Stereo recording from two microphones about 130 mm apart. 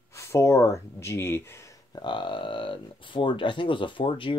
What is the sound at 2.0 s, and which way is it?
Speech, 40° left (ahead or behind).